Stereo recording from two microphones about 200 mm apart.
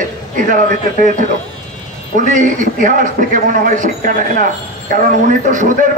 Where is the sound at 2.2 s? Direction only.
40° right (ahead or behind).